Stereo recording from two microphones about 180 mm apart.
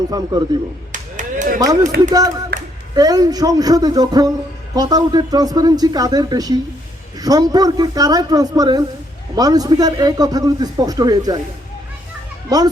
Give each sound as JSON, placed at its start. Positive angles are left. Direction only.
{"t": 0.1, "sound": "a man's voice", "side_deg": -20}
{"t": 0.9, "sound": "a sound", "side_deg": -45}
{"t": 1.5, "sound": "a man's voice", "side_deg": -20}
{"t": 2.5, "sound": "a sound", "side_deg": -60}
{"t": 2.9, "sound": "a man's voice", "side_deg": -20}
{"t": 12.5, "sound": "a man's voice", "side_deg": -20}